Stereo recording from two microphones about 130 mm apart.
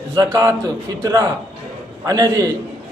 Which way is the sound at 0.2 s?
25° right (ahead or behind).